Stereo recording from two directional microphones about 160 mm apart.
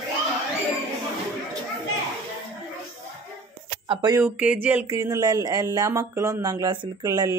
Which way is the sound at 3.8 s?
25° right (ahead or behind).